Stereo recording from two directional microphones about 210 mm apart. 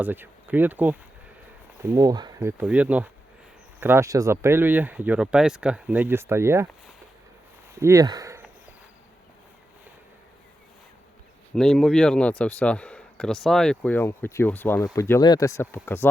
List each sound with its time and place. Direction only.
0.0 s speech: 10° right (ahead or behind)
7.8 s speech: 15° right (ahead or behind)
11.5 s a man's voice: centre (ahead or behind)